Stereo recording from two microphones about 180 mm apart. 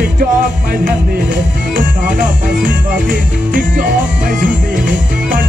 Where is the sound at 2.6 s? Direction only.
50° right (ahead or behind).